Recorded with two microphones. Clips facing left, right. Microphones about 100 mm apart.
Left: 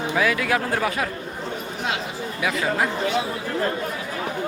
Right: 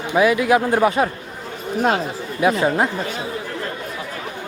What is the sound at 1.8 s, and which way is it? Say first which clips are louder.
Speech: right 7 dB; 35° right (ahead or behind).